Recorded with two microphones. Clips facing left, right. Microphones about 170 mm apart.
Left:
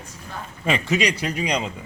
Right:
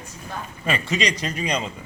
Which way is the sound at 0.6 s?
15° left (ahead or behind).